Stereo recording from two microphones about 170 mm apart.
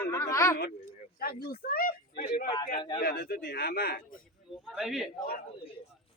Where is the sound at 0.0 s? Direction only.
15° left (ahead or behind).